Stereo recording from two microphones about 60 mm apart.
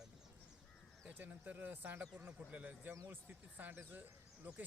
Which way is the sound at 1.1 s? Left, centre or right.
Right.